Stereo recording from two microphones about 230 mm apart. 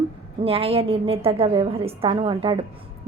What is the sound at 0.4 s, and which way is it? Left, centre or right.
A woman's voice, right.